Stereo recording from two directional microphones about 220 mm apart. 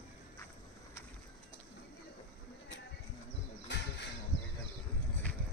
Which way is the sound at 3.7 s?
55° left (ahead or behind).